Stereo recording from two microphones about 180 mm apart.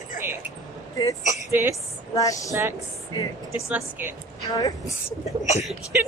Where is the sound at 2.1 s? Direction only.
20° left (ahead or behind).